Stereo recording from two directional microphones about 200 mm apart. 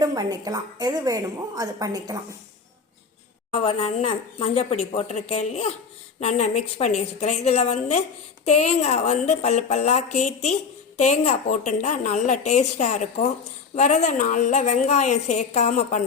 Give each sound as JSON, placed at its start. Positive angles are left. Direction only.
{"t": 0.0, "sound": "a woman's voice", "side_deg": -20}
{"t": 3.5, "sound": "a woman's voice", "side_deg": 30}